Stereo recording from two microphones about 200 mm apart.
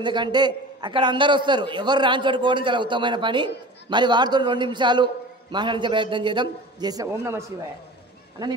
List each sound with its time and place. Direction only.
0.0 s a man's voice: 25° right (ahead or behind)